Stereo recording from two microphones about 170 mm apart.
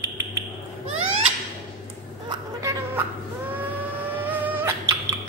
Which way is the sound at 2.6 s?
15° right (ahead or behind).